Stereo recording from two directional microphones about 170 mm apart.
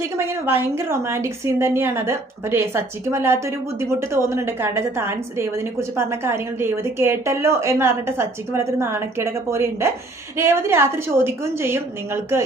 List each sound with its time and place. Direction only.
0.2 s a woman's voice: 15° right (ahead or behind)